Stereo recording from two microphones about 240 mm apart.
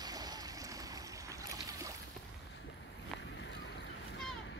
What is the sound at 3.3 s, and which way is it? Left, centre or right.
Boat, left.